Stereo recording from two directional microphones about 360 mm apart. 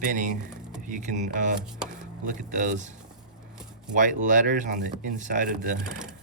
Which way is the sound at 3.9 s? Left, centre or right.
Right.